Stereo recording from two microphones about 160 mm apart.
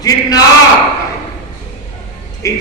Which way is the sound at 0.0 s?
25° left (ahead or behind).